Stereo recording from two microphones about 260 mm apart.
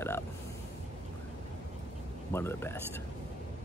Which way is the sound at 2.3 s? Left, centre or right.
Centre.